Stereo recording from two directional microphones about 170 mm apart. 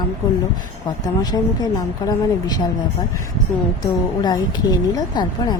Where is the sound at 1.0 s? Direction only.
25° left (ahead or behind).